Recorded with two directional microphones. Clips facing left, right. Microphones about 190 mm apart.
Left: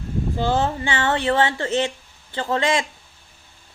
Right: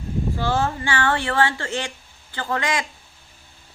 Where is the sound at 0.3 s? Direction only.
20° left (ahead or behind).